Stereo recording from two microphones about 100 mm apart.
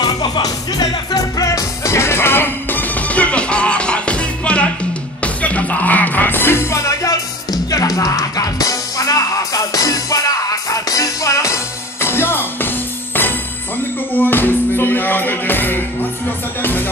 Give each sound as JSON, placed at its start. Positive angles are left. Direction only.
{"t": 0.0, "sound": "music", "side_deg": 40}